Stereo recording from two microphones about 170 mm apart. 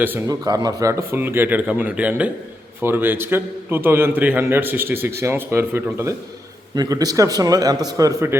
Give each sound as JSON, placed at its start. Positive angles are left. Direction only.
{"t": 0.0, "sound": "a man's voice", "side_deg": -10}